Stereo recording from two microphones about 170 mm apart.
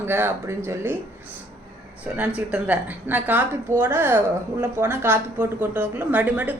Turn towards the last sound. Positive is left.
turn(degrees=-10)  # may be behind; listen again after turning